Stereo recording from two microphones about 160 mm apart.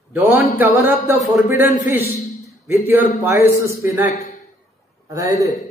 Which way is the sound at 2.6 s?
15° right (ahead or behind).